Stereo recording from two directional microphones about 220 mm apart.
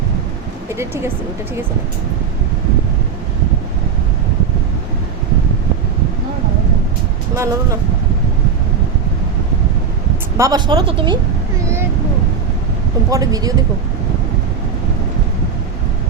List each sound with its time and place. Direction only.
7.3 s speech: 10° right (ahead or behind)
10.3 s speech: 15° right (ahead or behind)
13.1 s speech: 15° right (ahead or behind)